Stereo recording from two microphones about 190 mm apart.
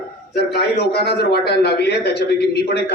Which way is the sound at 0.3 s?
60° left (ahead or behind).